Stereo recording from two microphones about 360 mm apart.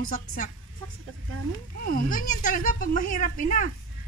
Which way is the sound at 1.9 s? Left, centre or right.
Left.